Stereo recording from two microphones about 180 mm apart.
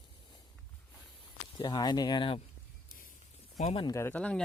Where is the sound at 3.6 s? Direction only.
30° left (ahead or behind).